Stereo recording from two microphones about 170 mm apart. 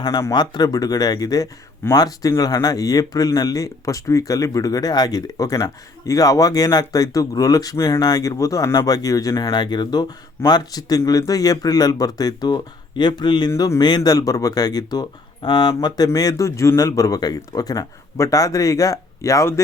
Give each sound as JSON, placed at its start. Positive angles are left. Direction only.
{"t": 0.0, "sound": "speech", "side_deg": 20}